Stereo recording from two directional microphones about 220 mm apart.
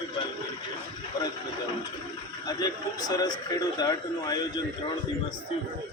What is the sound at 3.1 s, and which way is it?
A man's voice, 20° left (ahead or behind).